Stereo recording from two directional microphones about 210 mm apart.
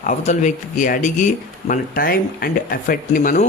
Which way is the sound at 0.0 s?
35° left (ahead or behind).